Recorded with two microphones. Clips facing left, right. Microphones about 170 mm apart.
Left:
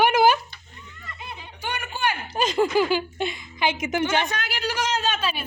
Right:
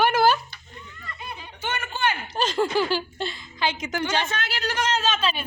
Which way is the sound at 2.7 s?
10° left (ahead or behind).